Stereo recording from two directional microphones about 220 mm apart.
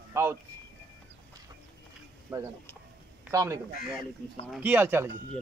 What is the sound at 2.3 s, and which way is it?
A man's voice, 15° right (ahead or behind).